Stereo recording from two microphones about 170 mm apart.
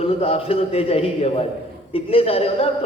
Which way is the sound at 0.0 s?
35° left (ahead or behind).